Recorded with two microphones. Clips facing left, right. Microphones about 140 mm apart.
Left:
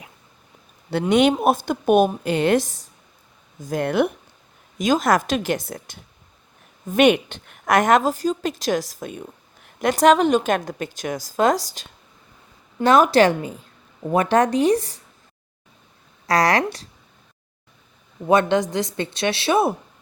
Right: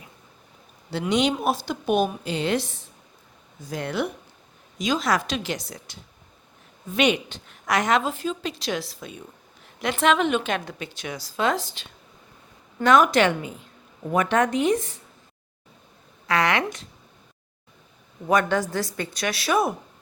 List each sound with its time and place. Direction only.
1.1 s a woman's voice: 55° left (ahead or behind); by 14.9 s 35° left (ahead or behind)
16.2 s speech: 40° left (ahead or behind)
18.3 s a woman's voice: 25° left (ahead or behind)